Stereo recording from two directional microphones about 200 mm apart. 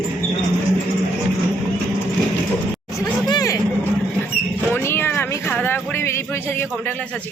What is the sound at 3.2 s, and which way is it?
Vehicle, 20° left (ahead or behind).